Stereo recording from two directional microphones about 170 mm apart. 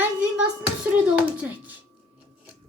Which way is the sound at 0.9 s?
10° right (ahead or behind).